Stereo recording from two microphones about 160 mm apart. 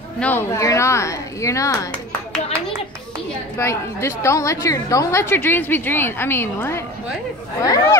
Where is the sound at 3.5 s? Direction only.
15° left (ahead or behind).